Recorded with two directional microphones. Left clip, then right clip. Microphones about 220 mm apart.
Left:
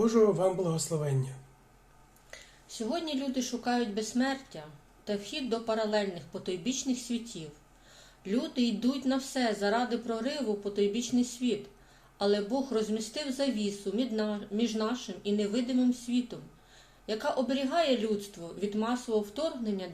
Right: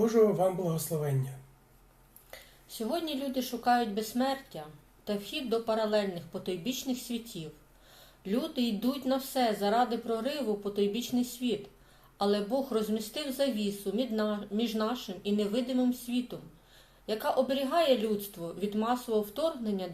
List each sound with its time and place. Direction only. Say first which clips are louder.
0.0 s speech: even; 15° left (ahead or behind)
2.6 s a woman's voice: even; 5° right (ahead or behind)